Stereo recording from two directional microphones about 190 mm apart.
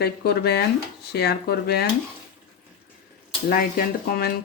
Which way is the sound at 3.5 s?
50° left (ahead or behind).